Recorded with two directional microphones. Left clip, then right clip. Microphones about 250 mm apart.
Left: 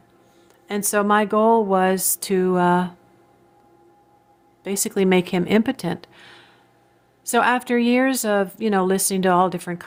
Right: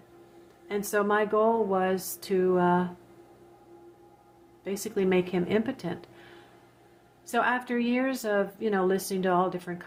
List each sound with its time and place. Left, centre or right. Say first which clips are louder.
0.7 s a woman's voice: left 7 dB; left
4.6 s a woman's voice: left 7 dB; left